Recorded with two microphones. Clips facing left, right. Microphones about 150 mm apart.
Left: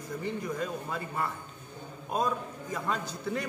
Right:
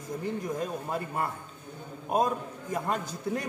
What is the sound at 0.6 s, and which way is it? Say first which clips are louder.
Speech: right 2 dB; 45° right (ahead or behind).